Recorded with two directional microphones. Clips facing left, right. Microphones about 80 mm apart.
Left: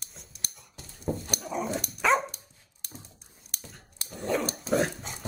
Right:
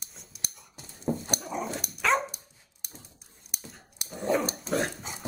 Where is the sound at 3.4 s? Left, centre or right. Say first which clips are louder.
Right 1 dB; centre.